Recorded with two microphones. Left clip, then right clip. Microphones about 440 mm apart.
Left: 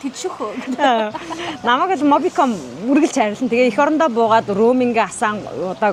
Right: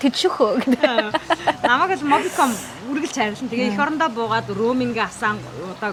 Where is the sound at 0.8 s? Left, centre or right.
Left.